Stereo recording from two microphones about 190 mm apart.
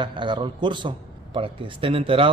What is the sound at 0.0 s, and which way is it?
A man's voice, 25° right (ahead or behind).